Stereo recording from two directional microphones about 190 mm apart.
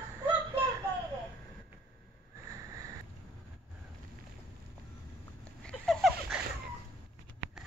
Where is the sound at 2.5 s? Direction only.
15° right (ahead or behind).